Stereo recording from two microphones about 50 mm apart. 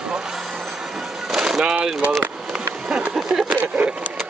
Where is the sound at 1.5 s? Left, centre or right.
Centre.